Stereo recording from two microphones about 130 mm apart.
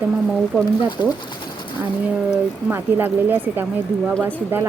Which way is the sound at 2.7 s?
15° right (ahead or behind).